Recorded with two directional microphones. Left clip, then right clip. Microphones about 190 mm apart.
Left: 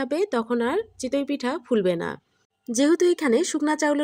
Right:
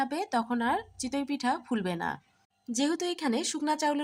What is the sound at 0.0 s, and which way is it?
Speech, 20° left (ahead or behind).